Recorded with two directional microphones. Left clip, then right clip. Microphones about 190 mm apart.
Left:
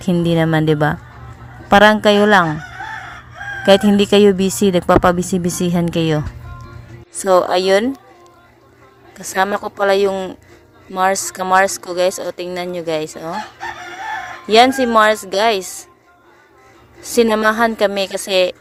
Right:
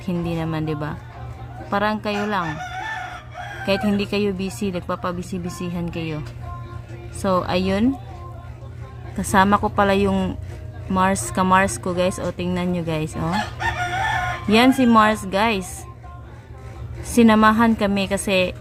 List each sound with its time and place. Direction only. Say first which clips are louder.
0.0 s speech: left 10 dB; 40° left (ahead or behind)
3.7 s speech: left 11 dB; 40° left (ahead or behind)
9.2 s a woman's voice: right 1 dB; 25° left (ahead or behind)
14.4 s a woman's voice: left 6 dB; 30° left (ahead or behind)
17.0 s a woman's voice: left 2 dB; 25° left (ahead or behind)